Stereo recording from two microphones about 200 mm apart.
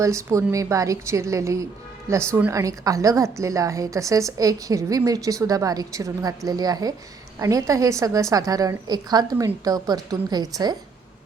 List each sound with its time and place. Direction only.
0.0 s a woman's voice: 15° right (ahead or behind)